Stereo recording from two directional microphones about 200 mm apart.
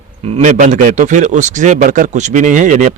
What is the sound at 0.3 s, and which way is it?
Speech, 35° right (ahead or behind).